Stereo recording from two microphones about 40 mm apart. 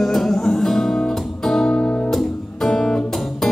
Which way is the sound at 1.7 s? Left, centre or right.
Left.